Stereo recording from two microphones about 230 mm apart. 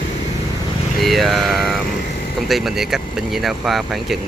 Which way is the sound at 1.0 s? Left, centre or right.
Centre.